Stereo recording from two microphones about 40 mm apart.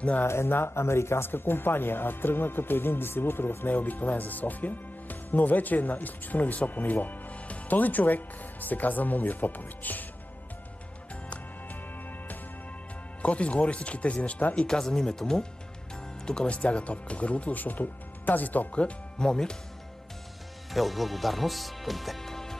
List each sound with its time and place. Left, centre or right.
0.2 s speech: left
3.7 s speech: left
13.2 s speech: left
14.7 s speech: centre
16.5 s speech: left
17.6 s speech: left
18.7 s speech: left
19.1 s speech: centre
20.7 s speech: centre